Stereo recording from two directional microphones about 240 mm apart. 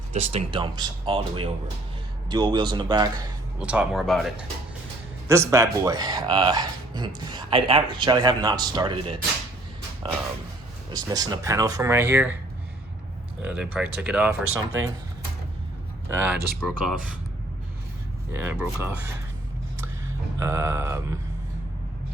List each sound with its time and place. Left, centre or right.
0.1 s speech: right
3.6 s speech: centre
5.3 s speech: centre
10.9 s speech: centre
13.4 s speech: centre
16.0 s speech: centre
18.3 s speech: centre
20.4 s speech: centre